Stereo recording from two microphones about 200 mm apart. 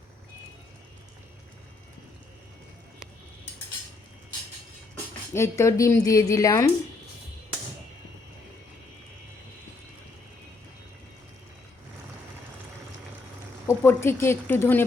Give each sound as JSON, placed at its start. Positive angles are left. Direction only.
{"t": 5.3, "sound": "a woman's voice", "side_deg": 15}
{"t": 13.7, "sound": "a woman's voice", "side_deg": 10}